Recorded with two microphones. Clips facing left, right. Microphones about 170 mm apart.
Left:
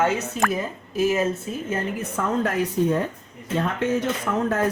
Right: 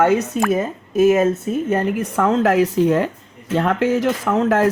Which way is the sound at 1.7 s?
75° right (ahead or behind).